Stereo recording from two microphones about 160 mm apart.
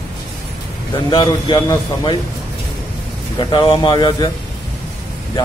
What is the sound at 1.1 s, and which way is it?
Speech, 30° left (ahead or behind).